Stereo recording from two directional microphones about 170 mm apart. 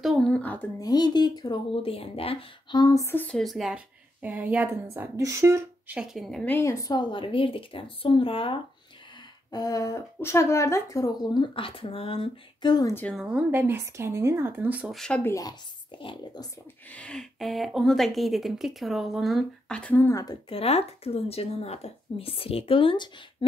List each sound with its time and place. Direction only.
0.0 s speech: centre (ahead or behind)
0.8 s speech: 25° left (ahead or behind); by 5.9 s 15° right (ahead or behind)
5.9 s speech: centre (ahead or behind); by 8.5 s 30° left (ahead or behind)
9.5 s speech: 20° left (ahead or behind)
12.9 s speech: 5° left (ahead or behind)
13.2 s speech: 10° right (ahead or behind); by 16.4 s 30° left (ahead or behind)
16.9 s speech: 5° left (ahead or behind)
20.4 s speech: 35° left (ahead or behind)